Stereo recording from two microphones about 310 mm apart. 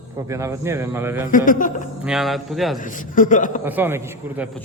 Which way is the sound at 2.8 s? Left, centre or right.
Left.